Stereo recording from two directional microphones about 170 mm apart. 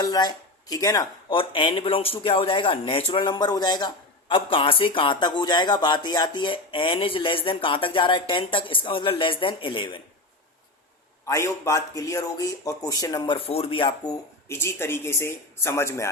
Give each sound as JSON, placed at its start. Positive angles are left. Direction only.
{"t": 0.0, "sound": "speech", "side_deg": 25}
{"t": 11.3, "sound": "speech", "side_deg": 15}